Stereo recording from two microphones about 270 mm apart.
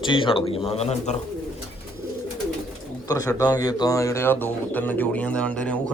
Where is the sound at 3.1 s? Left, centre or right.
Centre.